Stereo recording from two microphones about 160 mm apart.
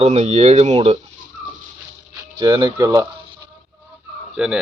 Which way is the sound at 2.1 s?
20° right (ahead or behind).